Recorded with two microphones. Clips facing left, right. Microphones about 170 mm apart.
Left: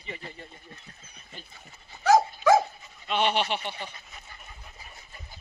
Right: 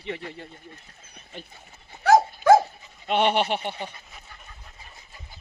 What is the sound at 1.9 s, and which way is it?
Dog, 50° right (ahead or behind).